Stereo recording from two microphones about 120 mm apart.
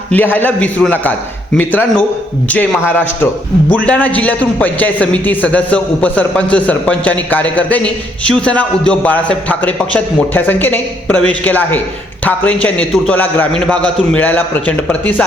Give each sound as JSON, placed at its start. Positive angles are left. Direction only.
{"t": 0.1, "sound": "a man's voice", "side_deg": 15}